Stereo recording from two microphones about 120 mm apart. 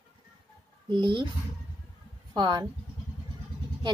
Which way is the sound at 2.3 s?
40° right (ahead or behind).